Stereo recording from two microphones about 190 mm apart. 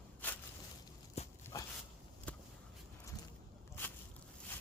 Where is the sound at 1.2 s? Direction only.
35° left (ahead or behind).